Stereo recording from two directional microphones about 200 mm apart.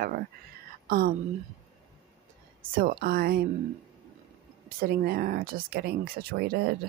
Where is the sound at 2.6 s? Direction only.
45° right (ahead or behind).